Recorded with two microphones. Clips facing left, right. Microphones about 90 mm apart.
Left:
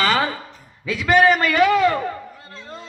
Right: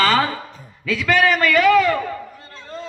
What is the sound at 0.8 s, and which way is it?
A man's voice, 30° left (ahead or behind).